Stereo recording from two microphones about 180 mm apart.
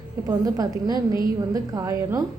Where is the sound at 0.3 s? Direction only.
20° right (ahead or behind).